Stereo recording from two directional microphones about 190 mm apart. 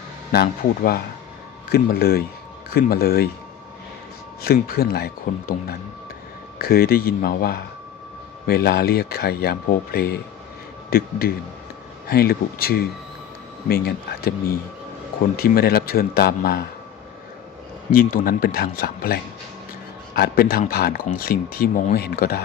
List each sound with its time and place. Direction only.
0.3 s speech: 50° left (ahead or behind)
4.4 s speech: 55° left (ahead or behind)
15.4 s speech: 55° left (ahead or behind)
18.1 s speech: 50° left (ahead or behind)